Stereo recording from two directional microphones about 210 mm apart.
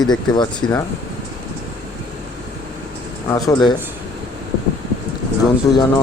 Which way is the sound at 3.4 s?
20° left (ahead or behind).